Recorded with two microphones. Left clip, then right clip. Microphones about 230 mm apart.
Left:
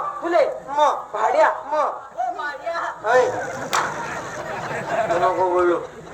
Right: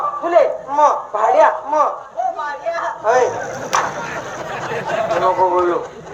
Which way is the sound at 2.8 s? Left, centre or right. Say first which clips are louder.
Right 3 dB; left.